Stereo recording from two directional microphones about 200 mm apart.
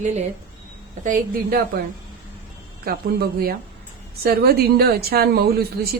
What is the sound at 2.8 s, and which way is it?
Speech, 50° right (ahead or behind).